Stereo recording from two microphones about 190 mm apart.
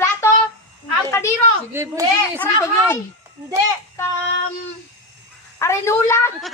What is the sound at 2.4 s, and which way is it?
Speech, 10° left (ahead or behind).